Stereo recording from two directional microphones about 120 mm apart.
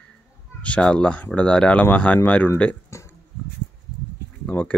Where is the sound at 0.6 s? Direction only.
10° left (ahead or behind).